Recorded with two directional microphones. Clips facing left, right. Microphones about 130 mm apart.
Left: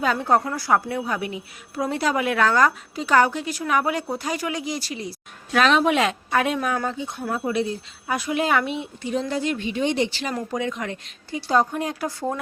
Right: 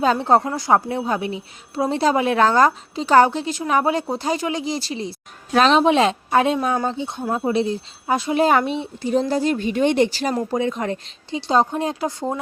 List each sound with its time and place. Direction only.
0.0 s a woman's voice: 30° right (ahead or behind); by 10.1 s 55° right (ahead or behind)
10.1 s speech: 40° right (ahead or behind)
11.3 s a woman's voice: 20° right (ahead or behind)